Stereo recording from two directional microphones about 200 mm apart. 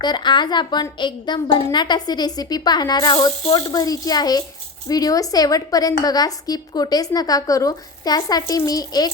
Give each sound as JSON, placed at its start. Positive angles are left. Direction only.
{"t": 0.0, "sound": "a woman's voice", "side_deg": 20}